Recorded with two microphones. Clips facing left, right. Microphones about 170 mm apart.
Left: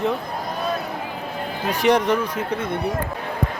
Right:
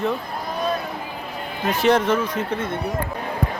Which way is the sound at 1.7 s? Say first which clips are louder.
Even; 15° left (ahead or behind).